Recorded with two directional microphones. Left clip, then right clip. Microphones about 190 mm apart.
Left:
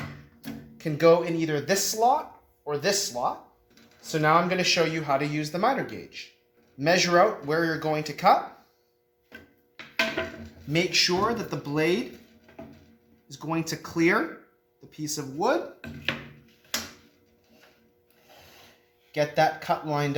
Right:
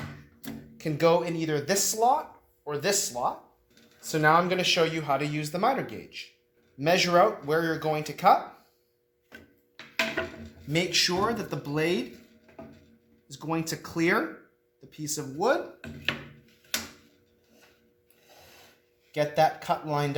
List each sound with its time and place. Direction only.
0.4 s speech: 25° right (ahead or behind)
4.0 s speech: 30° right (ahead or behind)
4.4 s speech: 20° right (ahead or behind)
9.7 s music: centre (ahead or behind)
10.7 s speech: 15° right (ahead or behind)
13.2 s speech: 20° right (ahead or behind)
15.8 s a sound: centre (ahead or behind)
19.1 s speech: 15° right (ahead or behind)